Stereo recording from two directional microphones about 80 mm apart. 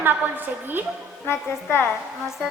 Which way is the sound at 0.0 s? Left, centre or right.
Right.